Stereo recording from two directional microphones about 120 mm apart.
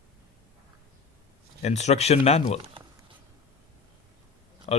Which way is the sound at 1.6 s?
70° left (ahead or behind).